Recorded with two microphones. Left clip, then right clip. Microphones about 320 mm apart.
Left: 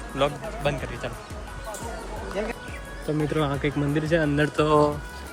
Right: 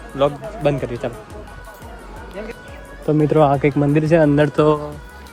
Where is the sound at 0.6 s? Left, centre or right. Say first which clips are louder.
Right 9 dB; centre.